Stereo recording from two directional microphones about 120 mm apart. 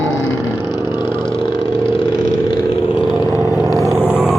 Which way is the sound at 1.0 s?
20° right (ahead or behind).